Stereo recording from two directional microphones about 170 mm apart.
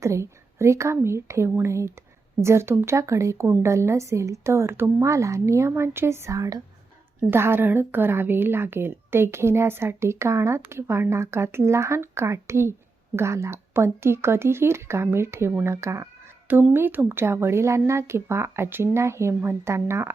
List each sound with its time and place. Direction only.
0.0 s a woman's voice: 15° right (ahead or behind)